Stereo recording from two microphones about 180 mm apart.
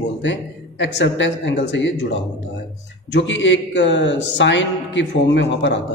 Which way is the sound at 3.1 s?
90° left.